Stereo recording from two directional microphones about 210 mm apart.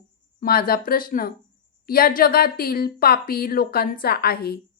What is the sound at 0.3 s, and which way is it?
A woman's voice, 45° left (ahead or behind).